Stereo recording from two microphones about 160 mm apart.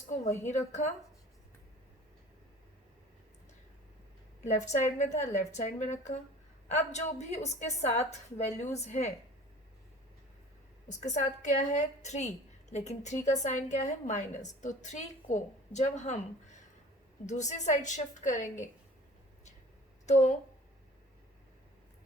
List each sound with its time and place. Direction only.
0.4 s a woman's voice: 45° left (ahead or behind)
4.4 s a woman's voice: 45° left (ahead or behind)
10.8 s a woman's voice: 45° left (ahead or behind)
20.1 s speech: 45° left (ahead or behind)